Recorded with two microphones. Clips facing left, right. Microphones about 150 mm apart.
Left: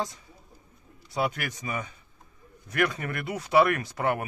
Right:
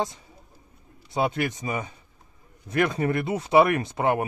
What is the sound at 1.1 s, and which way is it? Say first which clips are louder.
Speech: right 4 dB; 25° right (ahead or behind).